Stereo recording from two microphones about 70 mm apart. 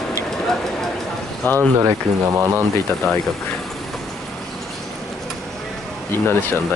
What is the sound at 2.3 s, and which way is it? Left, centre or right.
Speech, right.